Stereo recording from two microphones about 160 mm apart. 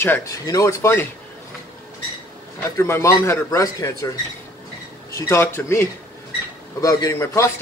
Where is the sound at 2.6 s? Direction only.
15° left (ahead or behind).